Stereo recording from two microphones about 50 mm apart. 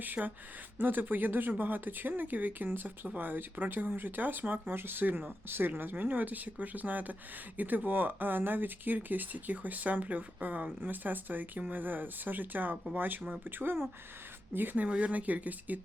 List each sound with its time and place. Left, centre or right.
0.0 s speech: right
4.7 s speech: right
14.8 s speech: right